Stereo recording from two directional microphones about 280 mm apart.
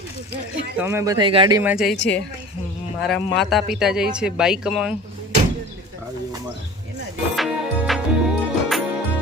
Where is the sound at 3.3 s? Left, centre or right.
Centre.